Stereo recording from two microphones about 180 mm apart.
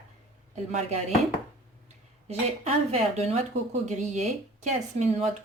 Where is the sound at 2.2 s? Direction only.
35° right (ahead or behind).